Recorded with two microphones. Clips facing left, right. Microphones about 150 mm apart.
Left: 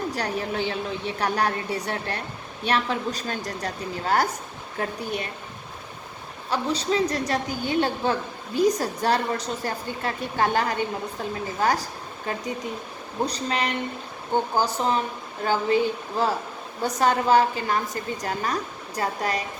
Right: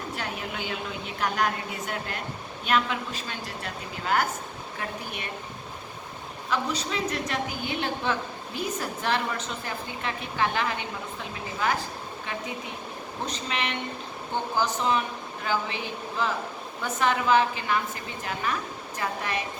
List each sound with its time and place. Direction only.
0.2 s a woman's voice: 35° left (ahead or behind)
6.5 s a woman's voice: 35° left (ahead or behind)